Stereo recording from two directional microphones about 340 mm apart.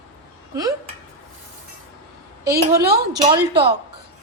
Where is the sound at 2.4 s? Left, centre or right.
Centre.